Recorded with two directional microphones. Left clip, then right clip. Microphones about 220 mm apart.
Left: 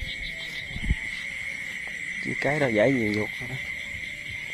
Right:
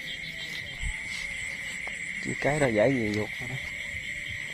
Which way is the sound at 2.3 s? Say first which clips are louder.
Left 1 dB; centre (ahead or behind).